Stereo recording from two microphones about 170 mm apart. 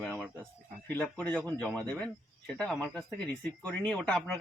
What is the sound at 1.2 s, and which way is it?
A man's voice, 10° left (ahead or behind).